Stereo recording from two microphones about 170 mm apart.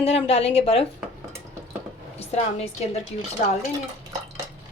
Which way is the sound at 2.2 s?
40° left (ahead or behind).